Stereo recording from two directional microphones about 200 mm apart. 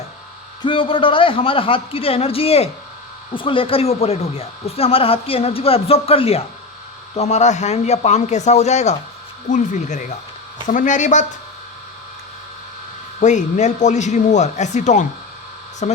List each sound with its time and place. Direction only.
0.6 s speech: 25° left (ahead or behind)
13.1 s speech: 35° left (ahead or behind)